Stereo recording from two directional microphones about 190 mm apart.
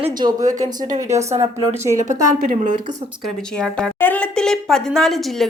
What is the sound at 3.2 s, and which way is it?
Speech, 5° left (ahead or behind).